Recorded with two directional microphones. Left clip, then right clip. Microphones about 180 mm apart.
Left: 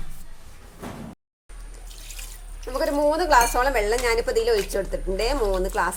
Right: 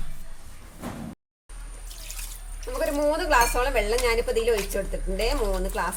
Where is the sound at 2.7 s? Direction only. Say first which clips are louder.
Left 3 dB; 25° left (ahead or behind).